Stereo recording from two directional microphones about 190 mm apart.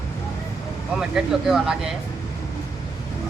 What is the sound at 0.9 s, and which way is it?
Speech, centre (ahead or behind).